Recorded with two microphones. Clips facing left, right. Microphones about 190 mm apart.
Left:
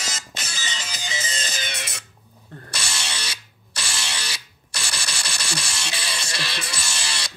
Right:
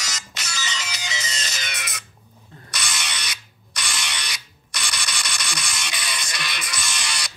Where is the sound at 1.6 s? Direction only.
30° left (ahead or behind).